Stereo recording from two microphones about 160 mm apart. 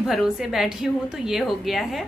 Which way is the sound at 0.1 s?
Centre (ahead or behind).